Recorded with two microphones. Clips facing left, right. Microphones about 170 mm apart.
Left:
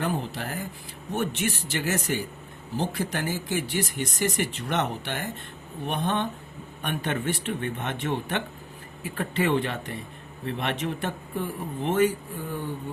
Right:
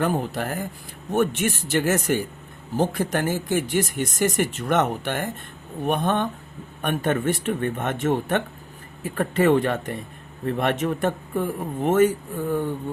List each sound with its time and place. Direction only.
0.0 s speech: 50° right (ahead or behind)